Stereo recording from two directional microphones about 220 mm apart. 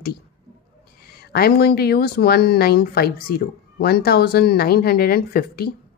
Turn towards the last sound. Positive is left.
turn(degrees=45)  # may be behind; listen again after turning